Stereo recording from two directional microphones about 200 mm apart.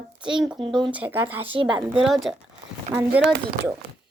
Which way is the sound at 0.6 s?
25° right (ahead or behind).